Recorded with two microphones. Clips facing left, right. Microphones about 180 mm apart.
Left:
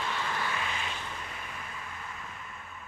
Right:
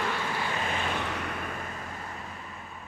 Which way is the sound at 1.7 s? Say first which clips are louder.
Right 4 dB; 45° right (ahead or behind).